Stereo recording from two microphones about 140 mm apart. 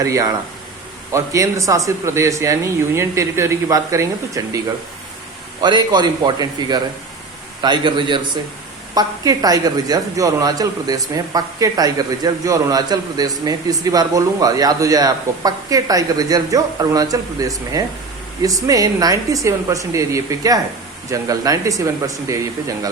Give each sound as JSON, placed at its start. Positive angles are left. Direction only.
{"t": 0.0, "sound": "a woman's voice", "side_deg": -25}